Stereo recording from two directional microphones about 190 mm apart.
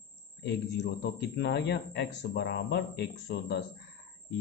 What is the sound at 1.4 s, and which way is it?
Speech, 65° left (ahead or behind).